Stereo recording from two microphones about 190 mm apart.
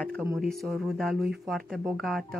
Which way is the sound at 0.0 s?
5° left (ahead or behind).